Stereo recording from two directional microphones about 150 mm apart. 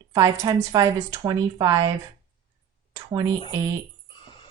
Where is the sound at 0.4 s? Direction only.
25° right (ahead or behind).